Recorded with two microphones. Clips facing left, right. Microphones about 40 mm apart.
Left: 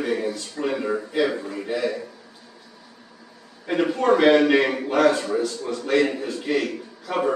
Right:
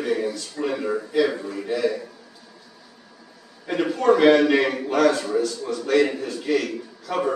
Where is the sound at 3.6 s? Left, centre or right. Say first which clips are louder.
Even; centre.